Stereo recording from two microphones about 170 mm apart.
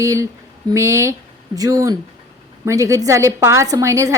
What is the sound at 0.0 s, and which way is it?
A woman's voice, 20° right (ahead or behind).